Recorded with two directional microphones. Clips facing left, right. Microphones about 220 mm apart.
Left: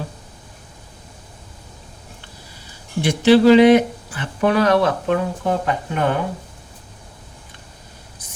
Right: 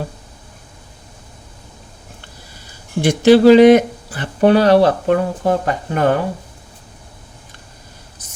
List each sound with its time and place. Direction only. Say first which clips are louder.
3.0 s speech: right 3 dB; 45° right (ahead or behind)